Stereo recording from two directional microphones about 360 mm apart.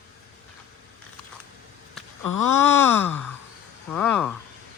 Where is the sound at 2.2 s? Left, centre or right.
Left.